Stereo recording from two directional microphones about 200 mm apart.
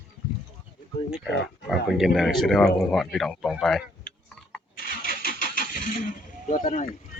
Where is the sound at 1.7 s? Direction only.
Centre (ahead or behind).